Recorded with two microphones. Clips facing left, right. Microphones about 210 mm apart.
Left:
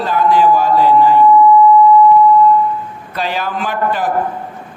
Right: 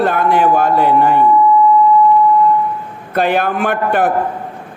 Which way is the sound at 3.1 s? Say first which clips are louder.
Right 6 dB; 55° right (ahead or behind).